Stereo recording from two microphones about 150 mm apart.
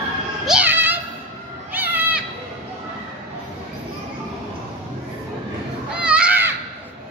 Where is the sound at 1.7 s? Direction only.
10° right (ahead or behind).